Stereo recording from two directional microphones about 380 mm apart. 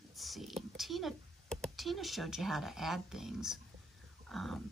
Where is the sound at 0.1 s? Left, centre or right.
Centre.